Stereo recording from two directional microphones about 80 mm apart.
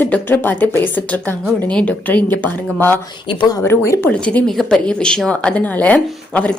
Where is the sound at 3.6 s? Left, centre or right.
Left.